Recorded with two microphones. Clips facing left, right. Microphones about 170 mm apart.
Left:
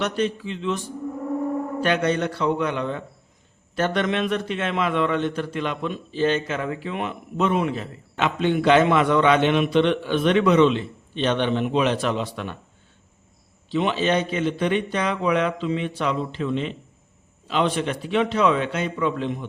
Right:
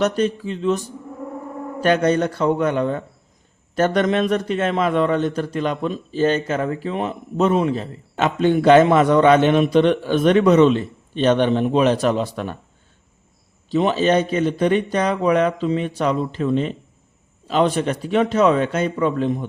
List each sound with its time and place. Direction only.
0.0 s a man's voice: 45° right (ahead or behind)
13.7 s a man's voice: 40° right (ahead or behind)